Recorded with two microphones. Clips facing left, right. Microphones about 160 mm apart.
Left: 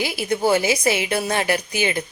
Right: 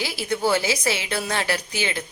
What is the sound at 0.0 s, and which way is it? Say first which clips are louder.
Speech: left 3 dB; 15° left (ahead or behind).